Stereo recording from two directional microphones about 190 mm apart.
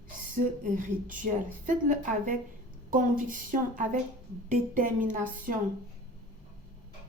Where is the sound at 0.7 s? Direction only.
45° right (ahead or behind).